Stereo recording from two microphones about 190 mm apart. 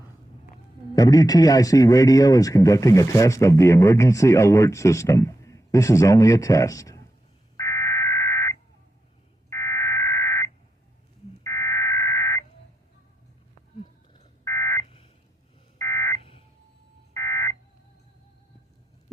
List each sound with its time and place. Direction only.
0.9 s speech: 20° left (ahead or behind)
7.5 s fire alarm: 15° left (ahead or behind)
14.1 s fire alarm: 15° left (ahead or behind)
14.8 s a sound: 30° left (ahead or behind)
15.8 s a sound: 15° left (ahead or behind)
17.2 s telephone dialing: 15° left (ahead or behind)